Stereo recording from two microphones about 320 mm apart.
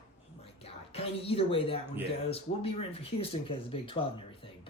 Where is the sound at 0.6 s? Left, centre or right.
Centre.